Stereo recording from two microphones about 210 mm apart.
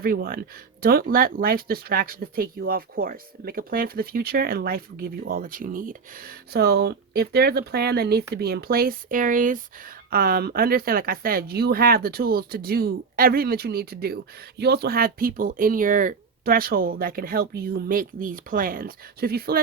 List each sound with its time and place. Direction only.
0.0 s speech: 45° right (ahead or behind)